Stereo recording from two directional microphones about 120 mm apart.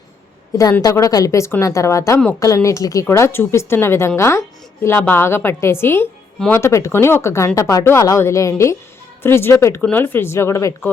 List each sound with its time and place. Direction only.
0.8 s a woman's voice: 30° left (ahead or behind)